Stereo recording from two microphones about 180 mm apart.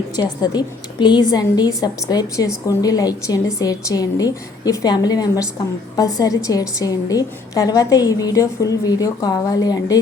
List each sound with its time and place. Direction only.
0.4 s a woman's voice: 25° left (ahead or behind)